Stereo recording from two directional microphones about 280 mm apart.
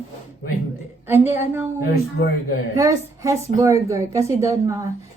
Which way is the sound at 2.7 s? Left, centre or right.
Centre.